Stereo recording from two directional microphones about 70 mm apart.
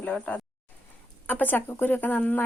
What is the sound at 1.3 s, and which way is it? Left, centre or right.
Speech, left.